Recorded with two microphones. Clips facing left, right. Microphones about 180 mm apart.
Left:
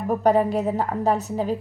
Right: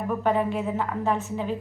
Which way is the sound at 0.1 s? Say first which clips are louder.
Left 6 dB; 40° left (ahead or behind).